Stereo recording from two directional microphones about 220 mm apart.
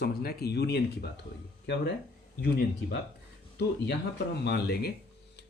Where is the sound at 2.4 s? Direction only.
45° left (ahead or behind).